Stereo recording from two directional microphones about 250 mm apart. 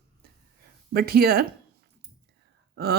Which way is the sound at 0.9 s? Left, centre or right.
Right.